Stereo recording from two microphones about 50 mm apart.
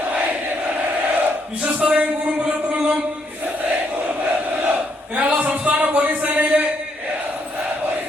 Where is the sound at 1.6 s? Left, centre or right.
Right.